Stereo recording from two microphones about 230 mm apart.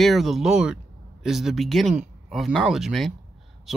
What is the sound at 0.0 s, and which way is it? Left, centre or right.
Speech, centre.